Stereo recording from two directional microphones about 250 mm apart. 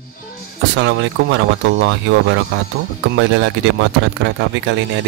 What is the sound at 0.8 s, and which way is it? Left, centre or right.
Speech, right.